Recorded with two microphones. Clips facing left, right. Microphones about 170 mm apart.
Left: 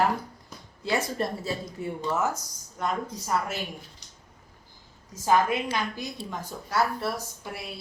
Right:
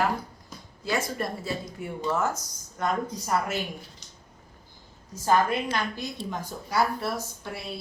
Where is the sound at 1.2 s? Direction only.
30° left (ahead or behind).